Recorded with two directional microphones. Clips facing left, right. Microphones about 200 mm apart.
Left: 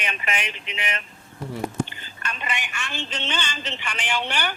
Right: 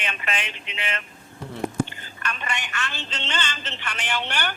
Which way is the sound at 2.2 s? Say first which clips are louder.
Even; 15° left (ahead or behind).